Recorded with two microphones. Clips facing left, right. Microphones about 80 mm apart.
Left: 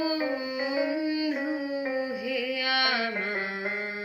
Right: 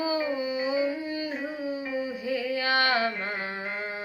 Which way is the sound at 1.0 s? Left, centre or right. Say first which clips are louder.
Left 4 dB; right.